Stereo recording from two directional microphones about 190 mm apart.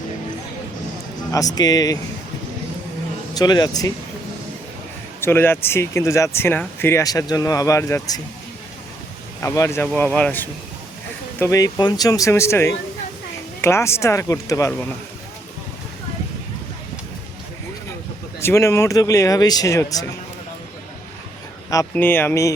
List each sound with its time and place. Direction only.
1.5 s speech: 20° left (ahead or behind)
3.3 s speech: 20° left (ahead or behind)
5.2 s speech: 10° left (ahead or behind)
9.4 s speech: 15° left (ahead or behind)
18.3 s speech: 15° left (ahead or behind)
21.7 s speech: 15° left (ahead or behind)